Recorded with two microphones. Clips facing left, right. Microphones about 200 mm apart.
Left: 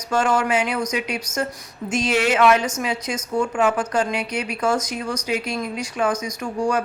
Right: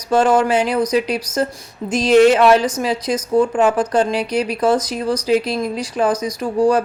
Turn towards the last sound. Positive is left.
turn(degrees=-35)  # may be behind; listen again after turning